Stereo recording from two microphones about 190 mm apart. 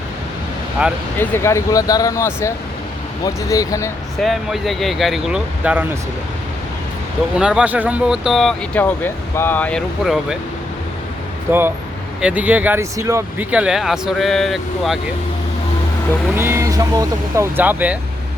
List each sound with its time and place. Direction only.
0.8 s speech: 5° right (ahead or behind)
1.2 s speech: 10° left (ahead or behind)
4.2 s speech: centre (ahead or behind)
7.3 s speech: 5° right (ahead or behind)
11.5 s speech: 10° right (ahead or behind)
16.3 s speech: 10° right (ahead or behind)